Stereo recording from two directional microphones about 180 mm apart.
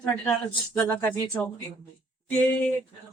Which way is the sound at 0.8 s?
10° left (ahead or behind).